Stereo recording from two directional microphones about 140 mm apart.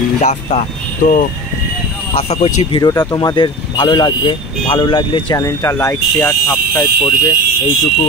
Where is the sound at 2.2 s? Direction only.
45° left (ahead or behind).